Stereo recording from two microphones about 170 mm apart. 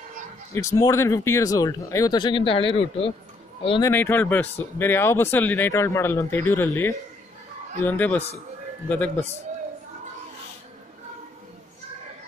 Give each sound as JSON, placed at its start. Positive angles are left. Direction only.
{"t": 0.6, "sound": "speech", "side_deg": 20}
{"t": 3.8, "sound": "speech", "side_deg": 10}